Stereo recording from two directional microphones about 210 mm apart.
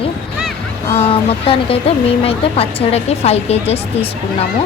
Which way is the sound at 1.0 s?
25° left (ahead or behind).